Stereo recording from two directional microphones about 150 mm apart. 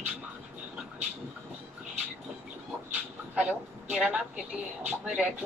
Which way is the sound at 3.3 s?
10° right (ahead or behind).